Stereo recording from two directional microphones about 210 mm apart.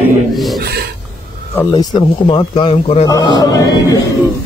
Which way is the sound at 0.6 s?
50° right (ahead or behind).